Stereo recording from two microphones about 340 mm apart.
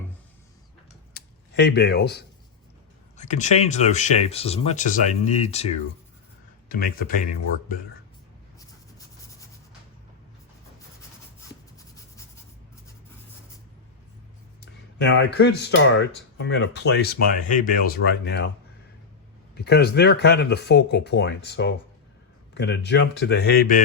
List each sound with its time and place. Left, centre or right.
1.1 s a sound: left
3.2 s speech: left
14.6 s speech: left
19.5 s speech: left